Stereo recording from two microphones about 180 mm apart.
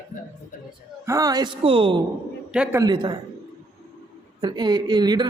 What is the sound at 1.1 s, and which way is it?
Speech, 20° right (ahead or behind).